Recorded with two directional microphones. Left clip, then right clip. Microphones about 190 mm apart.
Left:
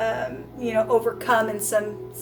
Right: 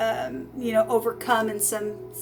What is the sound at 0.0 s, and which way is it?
Speech, 45° right (ahead or behind).